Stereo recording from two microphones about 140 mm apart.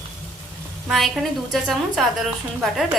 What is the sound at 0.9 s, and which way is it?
A woman's voice, centre (ahead or behind).